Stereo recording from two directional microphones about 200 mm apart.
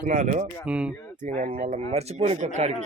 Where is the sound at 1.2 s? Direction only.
40° right (ahead or behind).